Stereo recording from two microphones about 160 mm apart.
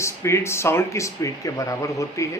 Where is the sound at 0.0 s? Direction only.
15° left (ahead or behind).